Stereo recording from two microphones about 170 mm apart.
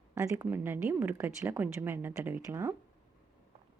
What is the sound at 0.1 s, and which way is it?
Speech, 15° right (ahead or behind).